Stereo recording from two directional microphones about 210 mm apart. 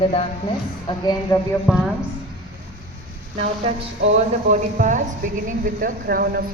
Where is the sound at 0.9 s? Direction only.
20° left (ahead or behind).